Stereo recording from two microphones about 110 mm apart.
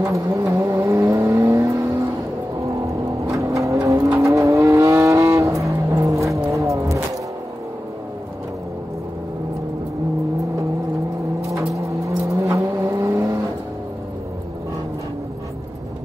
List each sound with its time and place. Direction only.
0.0 s vehicle: 30° right (ahead or behind)
3.3 s vehicle: 30° right (ahead or behind)
11.5 s vehicle: 30° right (ahead or behind)